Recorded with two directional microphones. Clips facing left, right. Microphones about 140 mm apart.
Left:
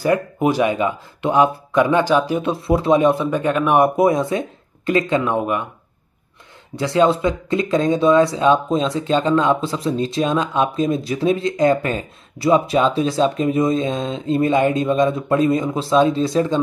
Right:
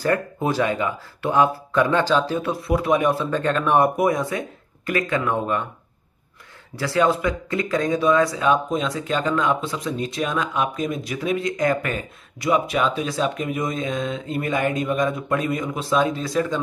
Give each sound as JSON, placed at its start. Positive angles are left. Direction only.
{"t": 0.0, "sound": "speech", "side_deg": 15}
{"t": 3.9, "sound": "speech", "side_deg": 25}
{"t": 6.7, "sound": "speech", "side_deg": 20}